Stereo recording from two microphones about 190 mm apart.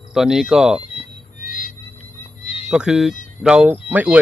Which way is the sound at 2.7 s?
5° right (ahead or behind).